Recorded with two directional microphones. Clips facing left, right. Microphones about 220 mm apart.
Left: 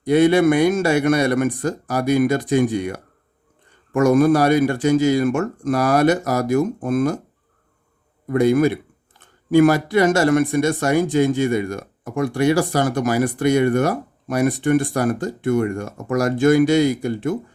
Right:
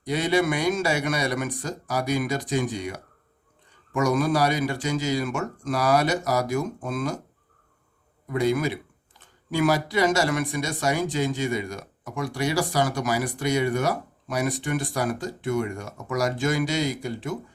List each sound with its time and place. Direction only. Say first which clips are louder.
0.0 s speech: left 9 dB; 55° left (ahead or behind)
8.3 s speech: left 8 dB; 55° left (ahead or behind)